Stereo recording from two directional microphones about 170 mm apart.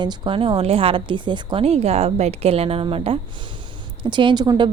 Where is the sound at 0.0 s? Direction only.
25° right (ahead or behind).